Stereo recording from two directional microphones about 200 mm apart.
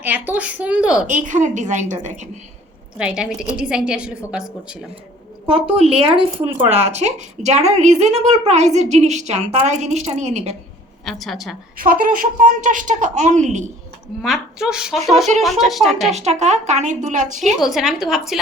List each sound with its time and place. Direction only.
0.0 s speech: 10° right (ahead or behind)
1.0 s speech: 40° right (ahead or behind)
3.0 s a woman's voice: 5° right (ahead or behind)
5.5 s speech: 30° right (ahead or behind)
11.0 s a woman's voice: centre (ahead or behind)
11.8 s speech: 45° right (ahead or behind)
14.2 s a woman's voice: centre (ahead or behind)
16.1 s speech: 35° right (ahead or behind)
17.4 s a woman's voice: centre (ahead or behind)